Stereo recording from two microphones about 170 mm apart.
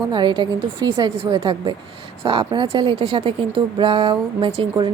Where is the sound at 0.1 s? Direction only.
25° right (ahead or behind).